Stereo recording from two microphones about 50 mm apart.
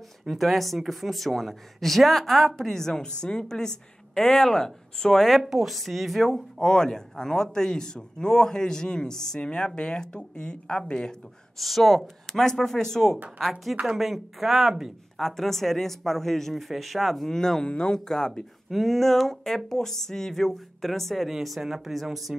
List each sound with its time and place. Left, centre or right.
0.3 s speech: centre
5.4 s speech: centre
11.6 s speech: centre
18.7 s speech: centre